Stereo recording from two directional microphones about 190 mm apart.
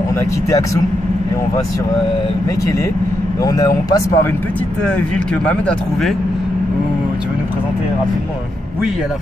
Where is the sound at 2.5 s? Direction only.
15° left (ahead or behind).